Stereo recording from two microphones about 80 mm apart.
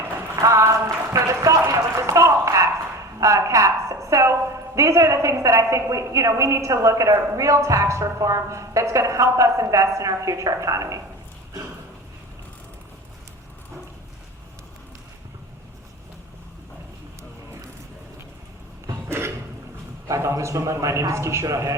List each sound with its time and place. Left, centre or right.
0.4 s a woman's voice: right
19.0 s a sound: right
20.1 s a woman's voice: right